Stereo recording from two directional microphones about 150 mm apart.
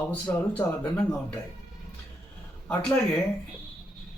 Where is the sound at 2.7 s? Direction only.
10° left (ahead or behind).